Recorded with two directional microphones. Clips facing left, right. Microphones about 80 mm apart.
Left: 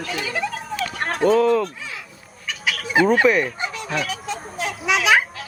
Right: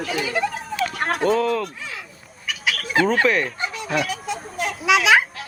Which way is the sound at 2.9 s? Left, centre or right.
Centre.